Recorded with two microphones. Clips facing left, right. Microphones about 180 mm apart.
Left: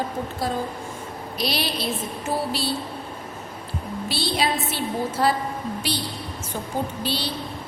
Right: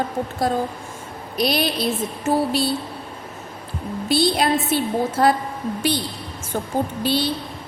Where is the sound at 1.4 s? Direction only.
50° right (ahead or behind).